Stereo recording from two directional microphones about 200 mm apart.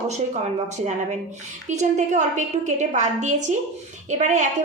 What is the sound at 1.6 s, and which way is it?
A woman's voice, 35° right (ahead or behind).